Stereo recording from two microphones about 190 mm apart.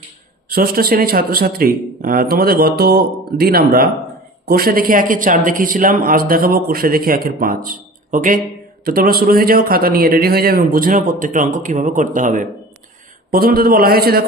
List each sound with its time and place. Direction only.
0.4 s speech: 50° right (ahead or behind)